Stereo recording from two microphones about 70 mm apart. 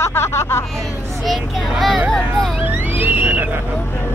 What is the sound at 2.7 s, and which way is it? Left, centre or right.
Vehicle, right.